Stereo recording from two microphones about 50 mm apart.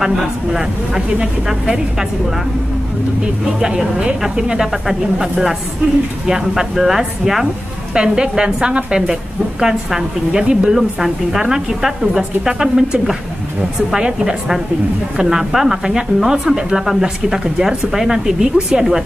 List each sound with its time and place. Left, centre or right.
0.0 s a woman's voice: centre
3.6 s a woman's voice: centre
7.9 s a woman's voice: centre